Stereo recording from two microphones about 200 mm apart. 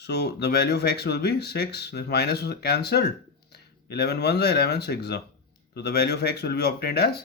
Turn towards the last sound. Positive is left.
turn(degrees=55)  # may be behind; listen again after turning